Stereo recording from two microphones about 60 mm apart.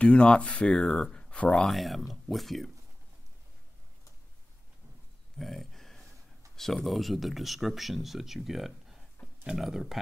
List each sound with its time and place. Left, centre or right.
0.0 s speech: centre
1.6 s speech: centre
5.4 s a sound: centre
6.5 s speech: centre